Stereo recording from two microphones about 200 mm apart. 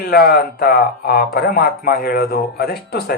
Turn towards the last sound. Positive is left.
turn(degrees=55)  # may be behind; listen again after turning